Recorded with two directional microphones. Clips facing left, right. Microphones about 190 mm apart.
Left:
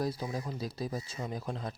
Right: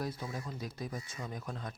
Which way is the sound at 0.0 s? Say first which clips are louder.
Left 5 dB; 35° left (ahead or behind).